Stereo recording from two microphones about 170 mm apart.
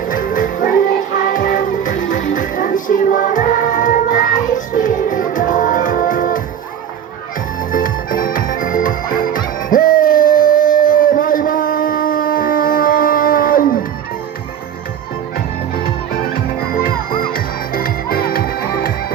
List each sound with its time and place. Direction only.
0.1 s music: 55° left (ahead or behind)
7.7 s music: 55° left (ahead or behind)
16.7 s music: 55° left (ahead or behind)